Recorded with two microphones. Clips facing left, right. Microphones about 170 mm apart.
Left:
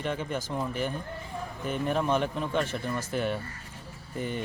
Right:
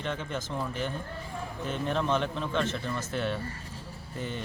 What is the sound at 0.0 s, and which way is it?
A man's voice, 10° left (ahead or behind).